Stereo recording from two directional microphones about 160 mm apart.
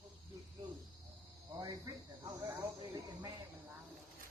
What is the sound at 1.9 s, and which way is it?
Speech, 20° right (ahead or behind).